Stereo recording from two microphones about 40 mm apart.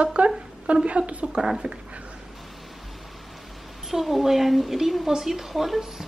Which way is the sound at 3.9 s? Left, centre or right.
Centre.